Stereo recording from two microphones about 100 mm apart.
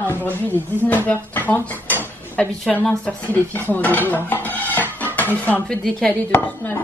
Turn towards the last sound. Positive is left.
turn(degrees=20)  # may be behind; listen again after turning